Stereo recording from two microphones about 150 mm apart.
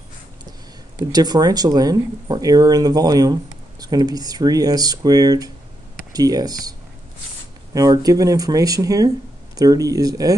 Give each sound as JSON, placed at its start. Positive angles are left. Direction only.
{"t": 0.5, "sound": "speech", "side_deg": -25}
{"t": 7.7, "sound": "speech", "side_deg": -25}